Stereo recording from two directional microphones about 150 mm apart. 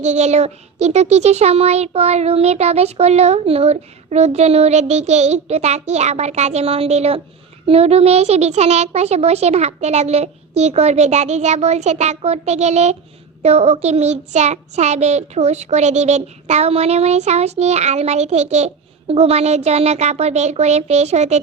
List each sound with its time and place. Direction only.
0.0 s child singing: 50° right (ahead or behind)